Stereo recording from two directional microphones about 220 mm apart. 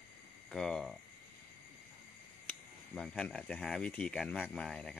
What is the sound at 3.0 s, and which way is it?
Speech, 5° left (ahead or behind).